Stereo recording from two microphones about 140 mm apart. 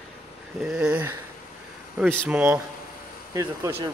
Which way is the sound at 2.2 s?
10° right (ahead or behind).